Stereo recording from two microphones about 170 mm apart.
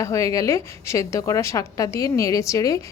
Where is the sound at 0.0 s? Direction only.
20° left (ahead or behind).